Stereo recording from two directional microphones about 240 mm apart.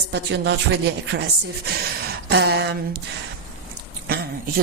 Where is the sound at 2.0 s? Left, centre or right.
Right.